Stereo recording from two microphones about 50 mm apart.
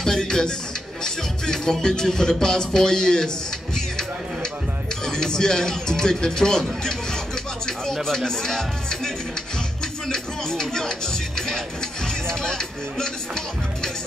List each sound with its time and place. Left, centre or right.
0.0 s music: centre
7.6 s speech: centre
10.0 s music: centre